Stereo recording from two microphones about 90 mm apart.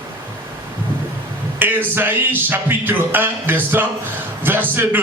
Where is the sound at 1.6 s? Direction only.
20° right (ahead or behind).